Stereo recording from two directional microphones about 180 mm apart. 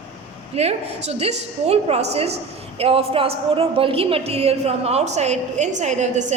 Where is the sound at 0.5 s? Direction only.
35° right (ahead or behind).